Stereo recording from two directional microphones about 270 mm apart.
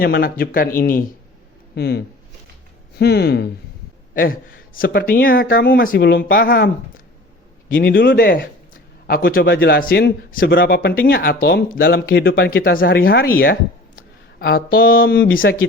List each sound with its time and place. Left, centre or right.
0.0 s a man's voice: left